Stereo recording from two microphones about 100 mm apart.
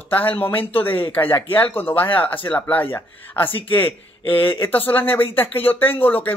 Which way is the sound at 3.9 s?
60° left (ahead or behind).